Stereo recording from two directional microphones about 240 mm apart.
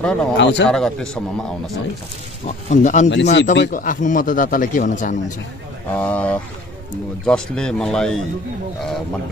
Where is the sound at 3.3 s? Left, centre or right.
Left.